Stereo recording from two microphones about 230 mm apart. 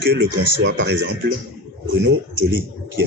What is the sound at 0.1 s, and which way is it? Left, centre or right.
Speech, right.